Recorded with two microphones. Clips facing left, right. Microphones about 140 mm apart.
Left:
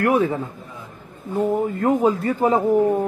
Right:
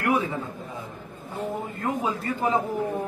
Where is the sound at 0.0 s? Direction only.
50° left (ahead or behind).